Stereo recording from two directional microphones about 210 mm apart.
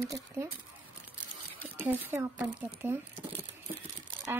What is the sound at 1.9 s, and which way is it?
Speech, 10° right (ahead or behind).